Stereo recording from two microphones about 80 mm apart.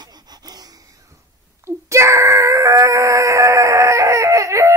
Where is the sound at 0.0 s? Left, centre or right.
Right.